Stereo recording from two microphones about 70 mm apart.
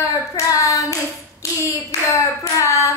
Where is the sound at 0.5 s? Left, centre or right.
Left.